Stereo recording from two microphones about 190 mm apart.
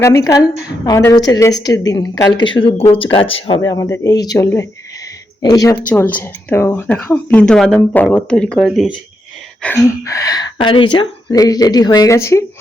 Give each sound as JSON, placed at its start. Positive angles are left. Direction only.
{"t": 0.0, "sound": "a woman's voice", "side_deg": 15}
{"t": 3.6, "sound": "a woman's voice", "side_deg": 20}
{"t": 5.9, "sound": "a woman's voice", "side_deg": 10}
{"t": 9.6, "sound": "a woman's voice", "side_deg": 15}